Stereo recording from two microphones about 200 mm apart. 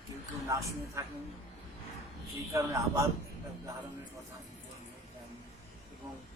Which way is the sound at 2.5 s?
15° right (ahead or behind).